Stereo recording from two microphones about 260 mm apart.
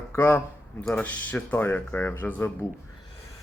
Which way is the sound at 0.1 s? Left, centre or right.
Centre.